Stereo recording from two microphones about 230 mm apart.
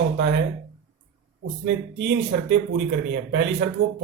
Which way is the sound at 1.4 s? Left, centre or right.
Right.